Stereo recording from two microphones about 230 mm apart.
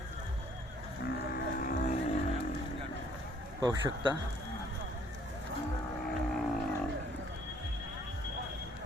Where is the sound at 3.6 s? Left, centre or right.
Centre.